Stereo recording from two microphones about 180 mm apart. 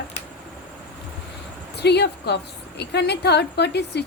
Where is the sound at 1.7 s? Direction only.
65° left (ahead or behind).